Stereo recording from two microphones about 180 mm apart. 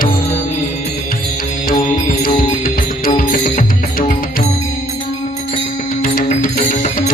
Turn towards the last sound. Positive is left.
turn(degrees=50)  # may be behind; listen again after turning